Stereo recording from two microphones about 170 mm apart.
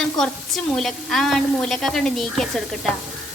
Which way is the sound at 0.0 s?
Centre (ahead or behind).